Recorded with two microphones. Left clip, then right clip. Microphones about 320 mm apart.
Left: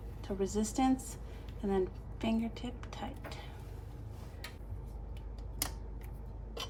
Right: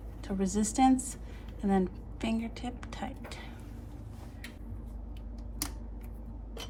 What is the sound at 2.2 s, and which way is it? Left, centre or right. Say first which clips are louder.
A woman's voice: right 1 dB; right.